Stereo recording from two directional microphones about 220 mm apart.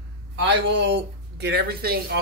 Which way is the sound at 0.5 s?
55° right (ahead or behind).